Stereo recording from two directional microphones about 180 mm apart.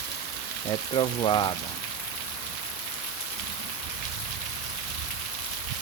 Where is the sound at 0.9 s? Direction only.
30° left (ahead or behind).